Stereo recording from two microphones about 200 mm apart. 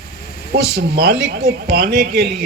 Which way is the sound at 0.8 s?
55° right (ahead or behind).